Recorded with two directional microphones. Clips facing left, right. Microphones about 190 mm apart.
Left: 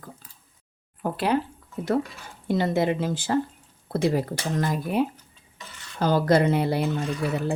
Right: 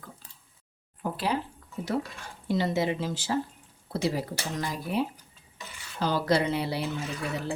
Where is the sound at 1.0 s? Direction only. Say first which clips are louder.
Left 5 dB; 60° left (ahead or behind).